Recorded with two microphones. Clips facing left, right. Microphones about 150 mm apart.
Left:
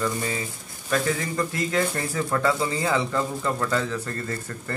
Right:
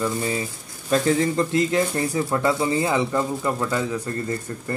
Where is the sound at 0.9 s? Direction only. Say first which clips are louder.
Right 5 dB; 25° right (ahead or behind).